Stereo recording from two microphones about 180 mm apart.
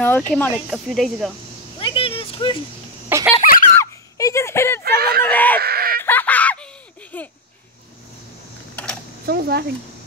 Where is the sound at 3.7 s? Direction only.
15° left (ahead or behind).